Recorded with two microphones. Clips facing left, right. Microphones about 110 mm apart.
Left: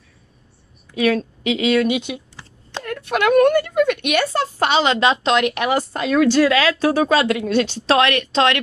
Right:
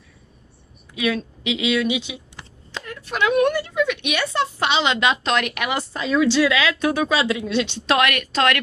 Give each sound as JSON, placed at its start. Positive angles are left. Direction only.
{"t": 0.9, "sound": "speech", "side_deg": 45}
{"t": 5.9, "sound": "a woman's voice", "side_deg": 55}